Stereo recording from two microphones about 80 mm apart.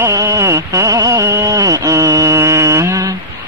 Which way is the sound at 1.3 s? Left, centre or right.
Right.